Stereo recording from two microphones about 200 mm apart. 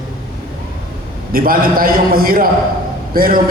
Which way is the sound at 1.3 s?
45° right (ahead or behind).